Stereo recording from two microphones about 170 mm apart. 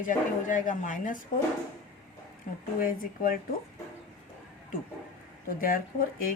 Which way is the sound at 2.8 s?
55° left (ahead or behind).